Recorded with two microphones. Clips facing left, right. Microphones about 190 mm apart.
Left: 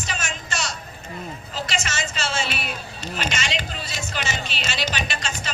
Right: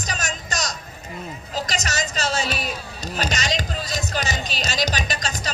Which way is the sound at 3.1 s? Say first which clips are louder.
Right 3 dB; 40° right (ahead or behind).